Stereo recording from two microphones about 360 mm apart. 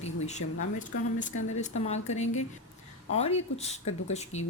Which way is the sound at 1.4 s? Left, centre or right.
Centre.